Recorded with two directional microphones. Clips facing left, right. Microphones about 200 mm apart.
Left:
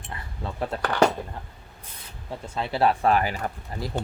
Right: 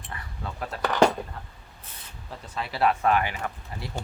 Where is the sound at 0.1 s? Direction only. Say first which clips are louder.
Left 2 dB; 30° left (ahead or behind).